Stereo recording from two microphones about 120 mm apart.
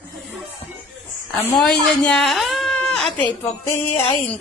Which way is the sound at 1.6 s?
5° left (ahead or behind).